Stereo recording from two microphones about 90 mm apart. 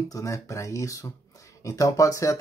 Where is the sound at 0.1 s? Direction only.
35° left (ahead or behind).